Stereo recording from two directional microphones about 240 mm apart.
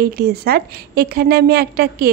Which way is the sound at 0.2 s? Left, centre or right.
Right.